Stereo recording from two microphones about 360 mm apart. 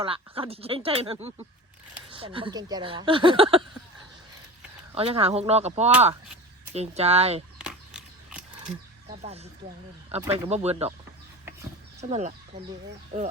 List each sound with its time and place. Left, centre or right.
0.0 s speech: centre
4.9 s speech: centre
7.6 s a sound: centre
9.2 s speech: centre
11.9 s speech: centre